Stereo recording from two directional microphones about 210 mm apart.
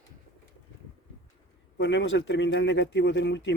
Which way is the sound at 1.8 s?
60° left (ahead or behind).